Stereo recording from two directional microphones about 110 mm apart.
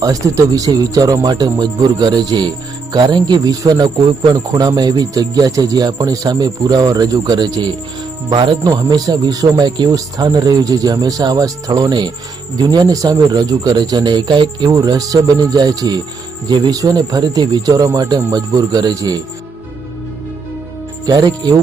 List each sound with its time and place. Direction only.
0.0 s cricket: 30° right (ahead or behind)
8.3 s speech: 50° right (ahead or behind)
8.6 s cricket: 35° right (ahead or behind)
21.1 s cricket: 40° right (ahead or behind)